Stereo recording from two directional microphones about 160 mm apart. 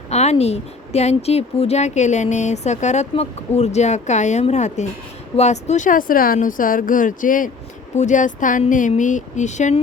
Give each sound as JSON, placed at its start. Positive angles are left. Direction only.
{"t": 0.1, "sound": "a woman's voice", "side_deg": 45}